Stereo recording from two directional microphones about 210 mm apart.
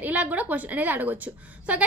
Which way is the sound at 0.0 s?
5° right (ahead or behind).